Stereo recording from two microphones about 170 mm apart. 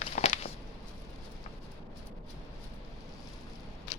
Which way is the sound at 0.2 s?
45° left (ahead or behind).